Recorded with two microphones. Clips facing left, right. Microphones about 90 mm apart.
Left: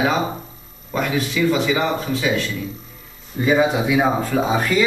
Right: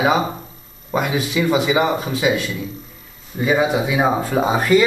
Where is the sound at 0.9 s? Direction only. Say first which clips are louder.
Right 1 dB; 15° right (ahead or behind).